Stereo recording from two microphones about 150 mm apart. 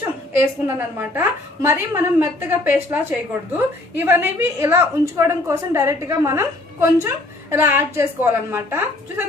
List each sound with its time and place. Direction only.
0.7 s a woman's voice: 15° right (ahead or behind)